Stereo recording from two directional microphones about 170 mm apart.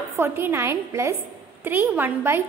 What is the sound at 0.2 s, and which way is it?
A woman's voice, 15° right (ahead or behind).